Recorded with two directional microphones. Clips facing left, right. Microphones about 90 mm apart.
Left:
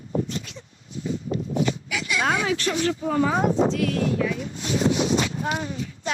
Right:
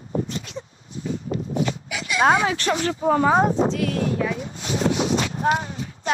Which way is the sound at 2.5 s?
55° right (ahead or behind).